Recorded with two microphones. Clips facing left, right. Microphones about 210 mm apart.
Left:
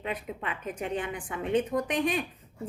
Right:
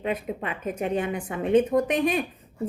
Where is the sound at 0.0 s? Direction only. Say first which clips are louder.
Right 6 dB; 20° right (ahead or behind).